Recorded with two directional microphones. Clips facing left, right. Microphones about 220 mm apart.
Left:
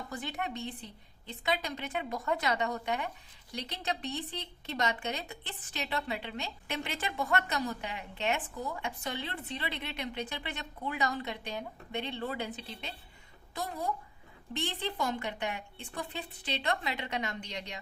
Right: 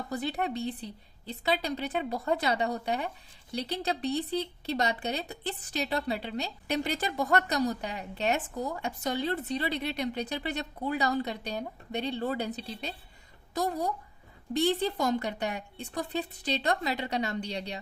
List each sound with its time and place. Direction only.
0.1 s a woman's voice: 35° right (ahead or behind)